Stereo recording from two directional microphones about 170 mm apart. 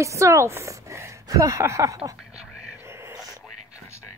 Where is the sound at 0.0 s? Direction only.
20° right (ahead or behind).